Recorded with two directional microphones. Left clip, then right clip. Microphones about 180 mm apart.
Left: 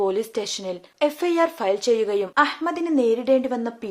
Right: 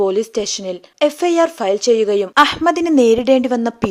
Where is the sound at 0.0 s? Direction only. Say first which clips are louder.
Right 6 dB; 35° right (ahead or behind).